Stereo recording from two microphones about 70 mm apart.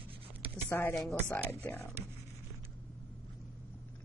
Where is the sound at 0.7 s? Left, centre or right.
Left.